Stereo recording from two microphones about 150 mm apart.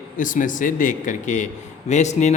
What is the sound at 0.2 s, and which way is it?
A man's voice, 60° left (ahead or behind).